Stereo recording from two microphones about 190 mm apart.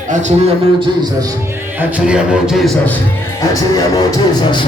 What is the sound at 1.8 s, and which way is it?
A man's voice, 5° right (ahead or behind).